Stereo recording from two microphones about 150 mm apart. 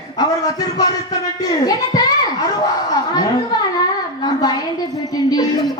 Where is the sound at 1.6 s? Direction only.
25° left (ahead or behind).